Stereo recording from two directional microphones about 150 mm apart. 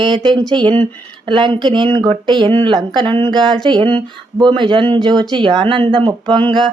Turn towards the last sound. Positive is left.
turn(degrees=-30)  # may be behind; listen again after turning